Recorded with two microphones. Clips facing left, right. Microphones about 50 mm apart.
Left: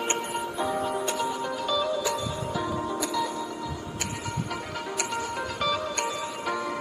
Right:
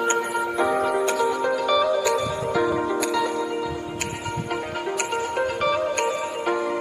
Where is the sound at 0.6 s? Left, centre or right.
Right.